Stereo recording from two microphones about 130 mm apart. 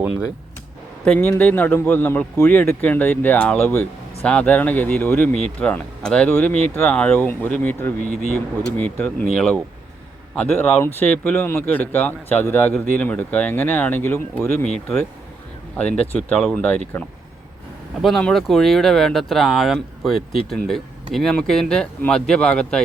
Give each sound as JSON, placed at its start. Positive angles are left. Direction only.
{"t": 1.0, "sound": "speech", "side_deg": 10}
{"t": 8.1, "sound": "speech", "side_deg": 65}
{"t": 8.6, "sound": "speech", "side_deg": 10}
{"t": 16.1, "sound": "speech", "side_deg": 5}
{"t": 18.0, "sound": "speech", "side_deg": 5}